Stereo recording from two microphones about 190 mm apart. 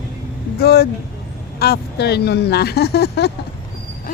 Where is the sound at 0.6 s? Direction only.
55° left (ahead or behind).